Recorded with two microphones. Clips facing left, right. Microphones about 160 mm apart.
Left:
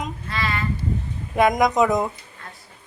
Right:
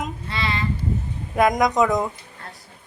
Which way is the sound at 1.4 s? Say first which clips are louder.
Even; centre (ahead or behind).